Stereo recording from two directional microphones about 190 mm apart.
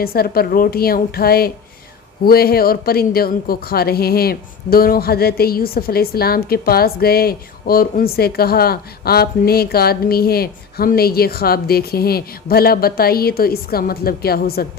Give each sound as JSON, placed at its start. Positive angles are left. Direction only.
{"t": 0.0, "sound": "a woman's voice", "side_deg": 55}